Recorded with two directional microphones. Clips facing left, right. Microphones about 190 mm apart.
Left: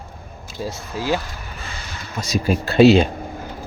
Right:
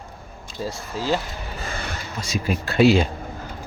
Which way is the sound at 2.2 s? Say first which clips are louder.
Left 5 dB; 40° left (ahead or behind).